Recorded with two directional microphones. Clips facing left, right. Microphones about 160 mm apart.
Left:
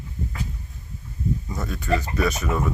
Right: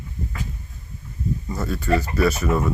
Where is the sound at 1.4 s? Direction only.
Centre (ahead or behind).